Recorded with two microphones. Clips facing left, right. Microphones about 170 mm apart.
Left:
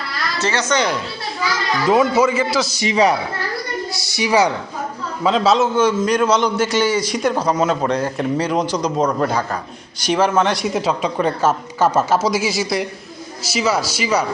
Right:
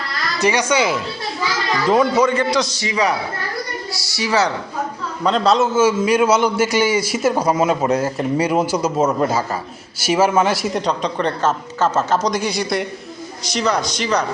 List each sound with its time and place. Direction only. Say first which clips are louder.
0.3 s a man's voice: right 2 dB; 15° right (ahead or behind)
1.9 s a woman's voice: even; 5° left (ahead or behind)
2.8 s a man's voice: left 3 dB; 20° left (ahead or behind)
5.2 s a man's voice: even; centre (ahead or behind)